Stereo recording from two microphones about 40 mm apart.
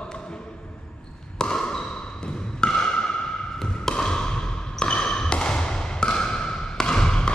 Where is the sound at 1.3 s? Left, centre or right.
Left.